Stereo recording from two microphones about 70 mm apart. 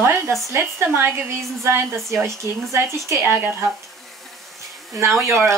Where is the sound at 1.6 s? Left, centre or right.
Right.